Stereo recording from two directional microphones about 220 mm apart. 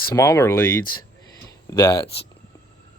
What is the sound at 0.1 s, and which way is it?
Speech, 15° left (ahead or behind).